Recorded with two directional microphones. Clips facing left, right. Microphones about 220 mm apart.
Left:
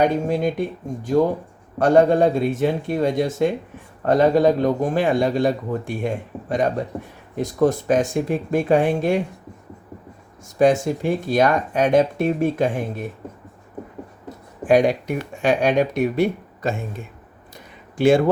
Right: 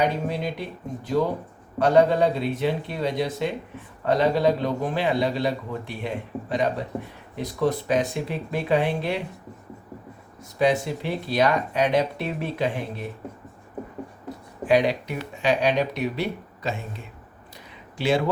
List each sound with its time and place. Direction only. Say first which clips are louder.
0.0 s a man's voice: left 6 dB; 45° left (ahead or behind)
10.4 s a man's voice: left 5 dB; 45° left (ahead or behind)
14.6 s a man's voice: left 4 dB; 50° left (ahead or behind)
17.9 s speech: left 7 dB; 50° left (ahead or behind)